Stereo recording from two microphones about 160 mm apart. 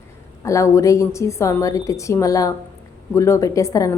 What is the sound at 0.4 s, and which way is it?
A woman's voice, 20° left (ahead or behind).